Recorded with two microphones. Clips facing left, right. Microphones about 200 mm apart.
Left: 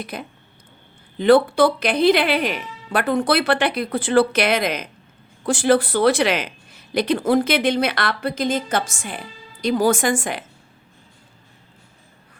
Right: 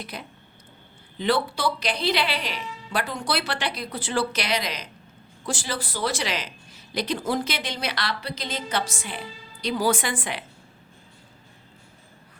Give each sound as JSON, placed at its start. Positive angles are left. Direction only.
{"t": 0.0, "sound": "speech", "side_deg": 50}